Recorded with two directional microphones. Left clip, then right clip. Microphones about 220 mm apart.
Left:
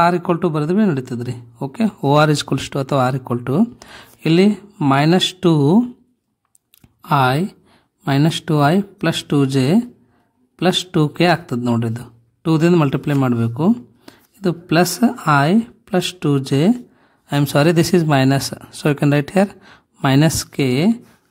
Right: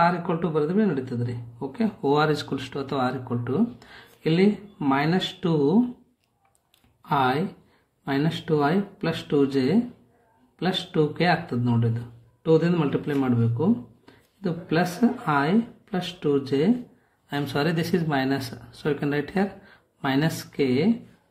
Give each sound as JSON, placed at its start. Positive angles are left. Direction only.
{"t": 0.0, "sound": "speech", "side_deg": 45}
{"t": 7.0, "sound": "speech", "side_deg": 45}